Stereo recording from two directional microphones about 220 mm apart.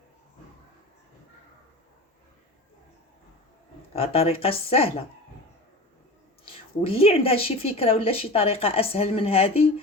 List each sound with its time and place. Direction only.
3.9 s speech: 25° left (ahead or behind)
6.4 s speech: 25° left (ahead or behind)